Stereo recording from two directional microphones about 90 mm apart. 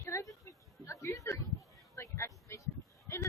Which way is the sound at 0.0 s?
30° left (ahead or behind).